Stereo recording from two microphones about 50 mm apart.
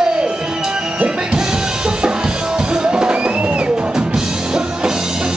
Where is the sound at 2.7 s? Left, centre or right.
Centre.